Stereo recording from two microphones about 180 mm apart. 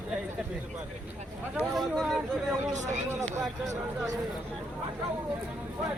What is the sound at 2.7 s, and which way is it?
Speech, 40° right (ahead or behind).